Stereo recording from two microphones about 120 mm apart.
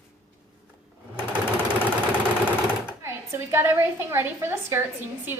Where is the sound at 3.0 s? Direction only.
20° right (ahead or behind).